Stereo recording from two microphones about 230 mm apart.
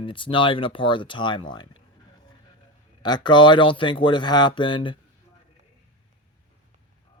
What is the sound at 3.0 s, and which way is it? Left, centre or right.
Speech, centre.